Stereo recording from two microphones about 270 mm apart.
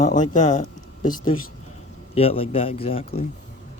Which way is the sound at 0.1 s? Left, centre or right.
Left.